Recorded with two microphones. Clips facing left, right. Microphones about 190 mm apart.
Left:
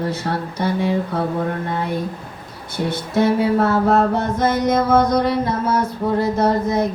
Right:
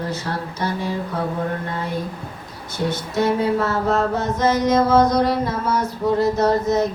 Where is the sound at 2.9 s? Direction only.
55° left (ahead or behind).